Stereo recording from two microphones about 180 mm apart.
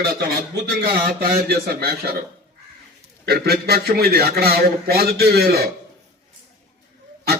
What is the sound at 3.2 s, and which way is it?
Speech, 60° right (ahead or behind).